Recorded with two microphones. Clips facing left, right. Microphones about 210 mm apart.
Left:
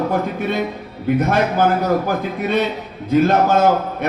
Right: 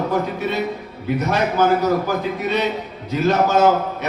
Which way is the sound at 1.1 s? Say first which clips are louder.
Left 1 dB; 55° left (ahead or behind).